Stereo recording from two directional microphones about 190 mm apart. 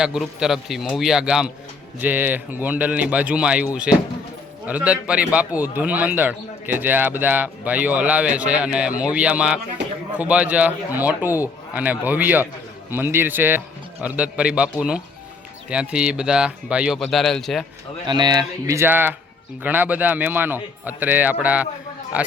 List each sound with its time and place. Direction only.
0.0 s speech: 5° right (ahead or behind)
18.0 s speech: 25° right (ahead or behind); by 22.3 s 5° right (ahead or behind)